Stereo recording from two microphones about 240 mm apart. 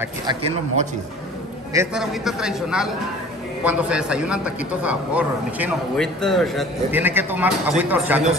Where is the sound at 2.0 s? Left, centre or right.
Centre.